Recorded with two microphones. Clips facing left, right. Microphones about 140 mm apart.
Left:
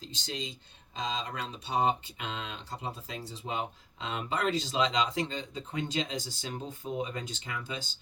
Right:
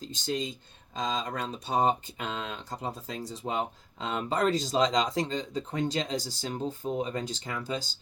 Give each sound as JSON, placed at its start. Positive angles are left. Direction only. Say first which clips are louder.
{"t": 0.0, "sound": "speech", "louder": "right 7 dB", "side_deg": -45}